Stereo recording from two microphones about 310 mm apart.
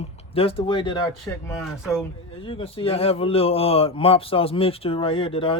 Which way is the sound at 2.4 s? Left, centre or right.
Centre.